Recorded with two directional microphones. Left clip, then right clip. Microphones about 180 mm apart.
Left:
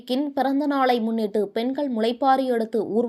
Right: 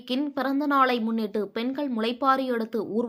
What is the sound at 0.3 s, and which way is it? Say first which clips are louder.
A woman's voice: even; 10° left (ahead or behind).